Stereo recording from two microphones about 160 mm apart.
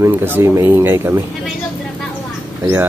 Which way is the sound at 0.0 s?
15° right (ahead or behind).